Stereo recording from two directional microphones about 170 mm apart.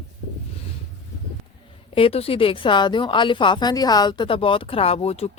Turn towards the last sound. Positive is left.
turn(degrees=40)  # may be behind; listen again after turning